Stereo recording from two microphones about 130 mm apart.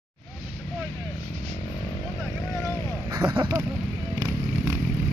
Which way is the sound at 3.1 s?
30° right (ahead or behind).